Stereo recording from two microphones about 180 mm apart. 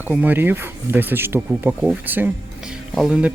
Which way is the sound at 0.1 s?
10° right (ahead or behind).